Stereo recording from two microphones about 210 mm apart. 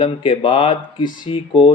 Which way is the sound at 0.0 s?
25° left (ahead or behind).